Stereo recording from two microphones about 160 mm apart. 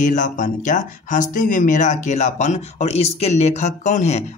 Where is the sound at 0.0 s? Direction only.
55° left (ahead or behind).